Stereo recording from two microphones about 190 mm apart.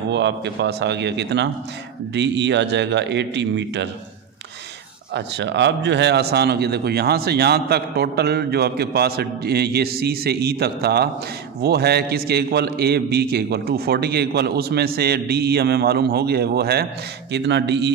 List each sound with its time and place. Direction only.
0.1 s a man's voice: 65° right (ahead or behind)
5.1 s a man's voice: 65° right (ahead or behind)